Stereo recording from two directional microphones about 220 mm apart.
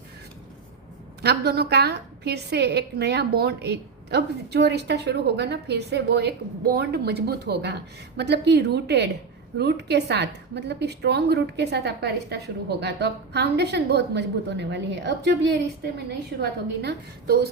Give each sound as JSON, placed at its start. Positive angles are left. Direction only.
{"t": 1.2, "sound": "a woman's voice", "side_deg": -50}